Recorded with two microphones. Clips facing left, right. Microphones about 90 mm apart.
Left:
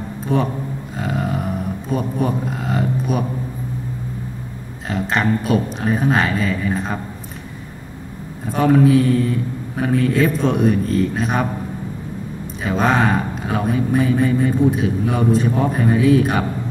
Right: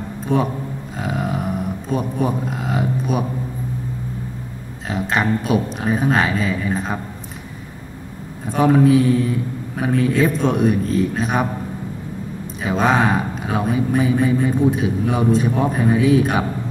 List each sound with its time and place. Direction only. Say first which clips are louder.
0.3 s speech: even; centre (ahead or behind)
0.9 s a sound: left 1 dB; centre (ahead or behind)
1.9 s speech: even; centre (ahead or behind)
4.8 s speech: left 1 dB; 5° right (ahead or behind)
8.5 s speech: even; 5° right (ahead or behind)
12.6 s speech: even; 5° right (ahead or behind)